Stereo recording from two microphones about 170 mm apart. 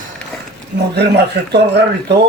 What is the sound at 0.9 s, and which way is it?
Speech, 75° right (ahead or behind).